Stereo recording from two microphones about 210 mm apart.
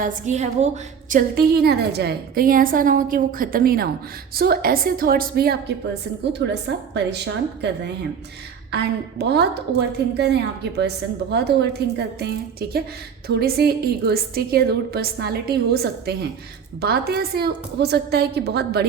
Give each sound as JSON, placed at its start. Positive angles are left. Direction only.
{"t": 0.0, "sound": "a woman's voice", "side_deg": -35}
{"t": 1.1, "sound": "a woman's voice", "side_deg": -50}